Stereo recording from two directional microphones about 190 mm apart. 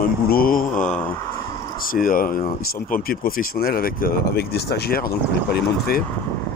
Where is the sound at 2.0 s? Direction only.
50° left (ahead or behind).